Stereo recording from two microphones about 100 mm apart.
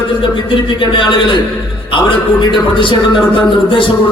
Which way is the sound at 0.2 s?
60° left (ahead or behind).